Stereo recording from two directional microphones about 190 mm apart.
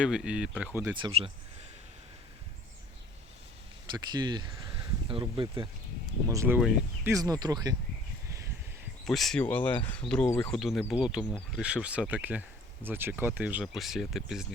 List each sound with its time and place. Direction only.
0.0 s speech: 5° right (ahead or behind)
3.9 s speech: 20° right (ahead or behind)
6.2 s speech: 15° right (ahead or behind)
6.6 s speech: 5° right (ahead or behind)
7.1 s speech: 20° right (ahead or behind)
9.0 s speech: centre (ahead or behind)